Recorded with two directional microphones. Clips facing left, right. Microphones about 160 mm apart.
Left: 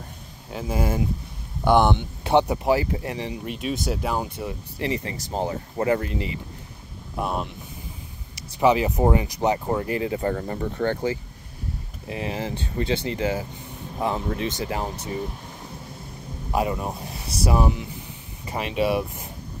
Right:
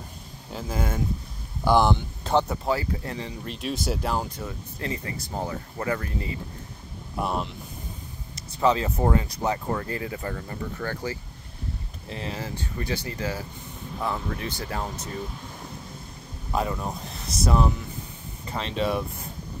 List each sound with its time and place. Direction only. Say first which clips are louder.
0.5 s speech: left 4 dB; 5° left (ahead or behind)
2.3 s speech: left 4 dB; 15° left (ahead or behind)
3.5 s speech: even; centre (ahead or behind); by 6.4 s 20° left (ahead or behind)
7.2 s speech: left 1 dB; centre (ahead or behind)
8.4 s speech: left 3 dB; 15° left (ahead or behind)
10.2 s speech: left 7 dB; 40° left (ahead or behind)
10.8 s speech: left 8 dB; 25° left (ahead or behind)
12.1 s speech: left 5 dB; 15° left (ahead or behind)
16.5 s speech: left 3 dB; 10° left (ahead or behind)